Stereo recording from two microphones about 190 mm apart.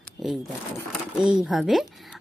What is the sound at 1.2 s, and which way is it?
Speech, 5° right (ahead or behind).